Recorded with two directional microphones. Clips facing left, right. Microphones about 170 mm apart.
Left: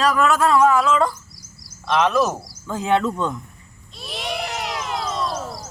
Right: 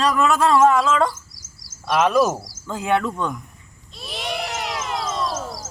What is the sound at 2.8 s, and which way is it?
Speech, 20° left (ahead or behind).